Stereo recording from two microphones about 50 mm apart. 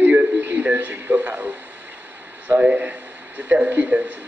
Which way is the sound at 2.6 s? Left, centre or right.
Right.